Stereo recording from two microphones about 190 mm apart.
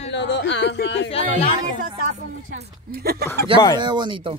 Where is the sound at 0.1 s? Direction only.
65° left (ahead or behind).